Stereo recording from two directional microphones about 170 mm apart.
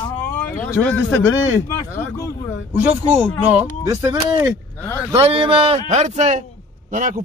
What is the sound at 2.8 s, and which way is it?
Speech, 10° right (ahead or behind).